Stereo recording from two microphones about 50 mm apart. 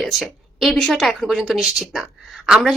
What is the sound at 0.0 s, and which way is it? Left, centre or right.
Speech, centre.